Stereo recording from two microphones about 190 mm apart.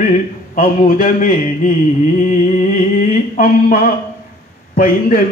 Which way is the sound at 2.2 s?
40° left (ahead or behind).